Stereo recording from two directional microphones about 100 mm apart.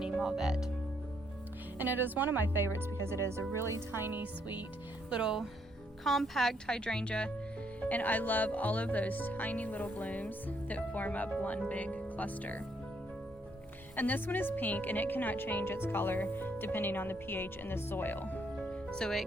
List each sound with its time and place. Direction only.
0.1 s speech: 5° right (ahead or behind)
1.8 s speech: 20° right (ahead or behind)
5.1 s speech: 5° right (ahead or behind); by 12.6 s 15° left (ahead or behind)
13.9 s speech: 20° left (ahead or behind)
18.6 s music: 10° left (ahead or behind)